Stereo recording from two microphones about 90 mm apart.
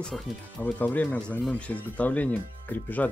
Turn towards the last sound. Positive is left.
turn(degrees=20)  # may be behind; listen again after turning